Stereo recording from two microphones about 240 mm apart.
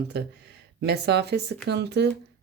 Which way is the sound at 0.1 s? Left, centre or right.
Right.